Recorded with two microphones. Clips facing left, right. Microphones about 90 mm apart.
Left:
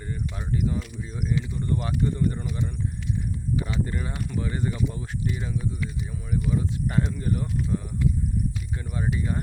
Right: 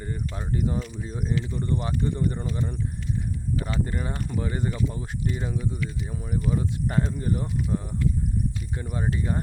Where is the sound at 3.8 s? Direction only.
35° right (ahead or behind).